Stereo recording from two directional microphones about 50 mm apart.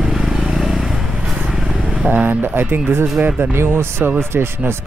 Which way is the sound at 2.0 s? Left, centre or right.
Right.